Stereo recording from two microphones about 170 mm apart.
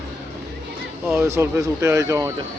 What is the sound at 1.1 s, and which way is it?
Speech, 15° right (ahead or behind).